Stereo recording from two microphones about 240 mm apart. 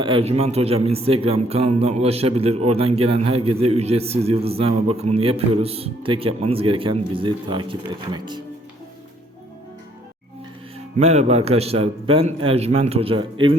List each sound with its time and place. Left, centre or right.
0.0 s a man's voice: right
10.9 s a man's voice: right